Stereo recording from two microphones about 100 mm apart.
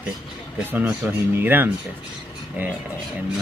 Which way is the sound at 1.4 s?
20° right (ahead or behind).